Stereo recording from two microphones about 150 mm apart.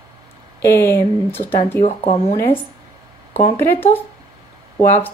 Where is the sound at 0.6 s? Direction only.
15° left (ahead or behind).